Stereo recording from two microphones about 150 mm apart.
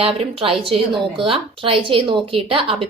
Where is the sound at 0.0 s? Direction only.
40° right (ahead or behind).